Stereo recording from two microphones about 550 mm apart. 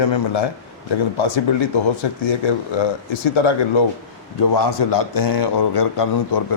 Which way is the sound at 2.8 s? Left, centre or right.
Left.